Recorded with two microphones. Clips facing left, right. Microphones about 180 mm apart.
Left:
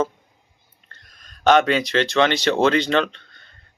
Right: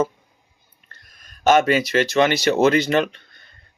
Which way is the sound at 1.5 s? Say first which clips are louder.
Even; 5° right (ahead or behind).